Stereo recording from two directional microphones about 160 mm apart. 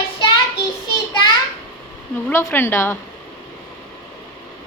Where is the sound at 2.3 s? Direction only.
15° left (ahead or behind).